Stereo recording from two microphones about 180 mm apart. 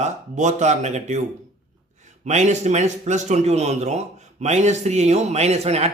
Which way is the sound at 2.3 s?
40° right (ahead or behind).